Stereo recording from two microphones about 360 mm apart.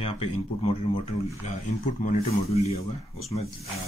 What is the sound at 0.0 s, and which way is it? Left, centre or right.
Speech, centre.